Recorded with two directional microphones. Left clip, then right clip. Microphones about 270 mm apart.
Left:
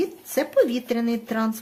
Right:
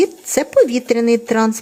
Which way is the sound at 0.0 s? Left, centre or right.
Right.